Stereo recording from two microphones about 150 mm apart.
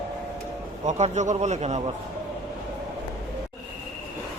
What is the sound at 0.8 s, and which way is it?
Speech, 50° right (ahead or behind).